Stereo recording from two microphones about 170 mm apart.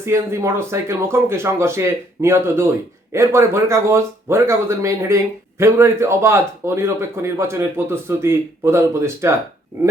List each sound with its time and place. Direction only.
0.0 s speech: 15° right (ahead or behind)